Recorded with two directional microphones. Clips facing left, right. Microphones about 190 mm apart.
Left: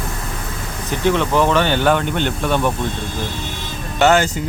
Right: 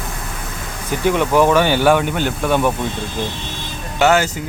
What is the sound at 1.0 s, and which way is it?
Speech, 10° right (ahead or behind).